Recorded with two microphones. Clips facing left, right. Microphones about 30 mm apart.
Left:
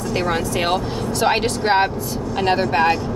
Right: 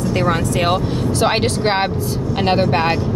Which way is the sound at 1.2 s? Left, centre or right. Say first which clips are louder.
Right 1 dB; centre.